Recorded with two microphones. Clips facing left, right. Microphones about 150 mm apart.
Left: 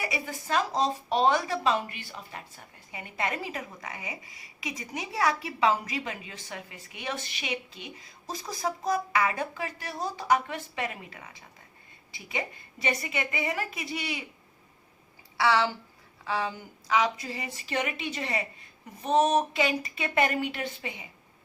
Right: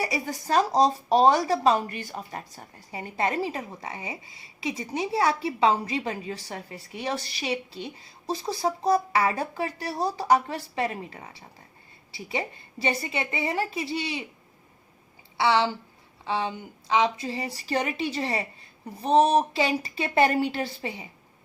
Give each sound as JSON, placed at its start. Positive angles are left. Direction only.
{"t": 0.0, "sound": "a woman's voice", "side_deg": -35}
{"t": 15.4, "sound": "a woman's voice", "side_deg": -25}